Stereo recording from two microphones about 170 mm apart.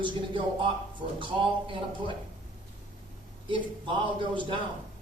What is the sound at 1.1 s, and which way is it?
Speech, 30° right (ahead or behind).